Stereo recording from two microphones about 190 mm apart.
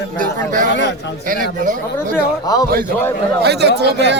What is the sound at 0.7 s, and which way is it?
Speech, 60° left (ahead or behind).